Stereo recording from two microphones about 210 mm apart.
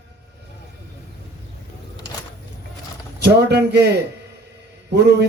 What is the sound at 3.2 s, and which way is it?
A man's voice, 50° right (ahead or behind).